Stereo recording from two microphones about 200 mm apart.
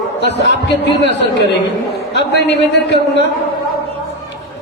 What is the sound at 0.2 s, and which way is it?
A man's voice, 60° left (ahead or behind).